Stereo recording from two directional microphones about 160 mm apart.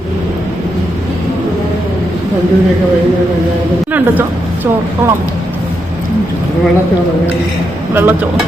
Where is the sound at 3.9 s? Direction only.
10° right (ahead or behind).